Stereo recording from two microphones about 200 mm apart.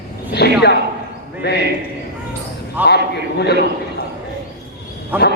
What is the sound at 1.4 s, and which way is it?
Speech, 55° left (ahead or behind).